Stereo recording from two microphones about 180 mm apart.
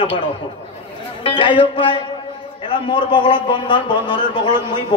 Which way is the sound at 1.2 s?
25° left (ahead or behind).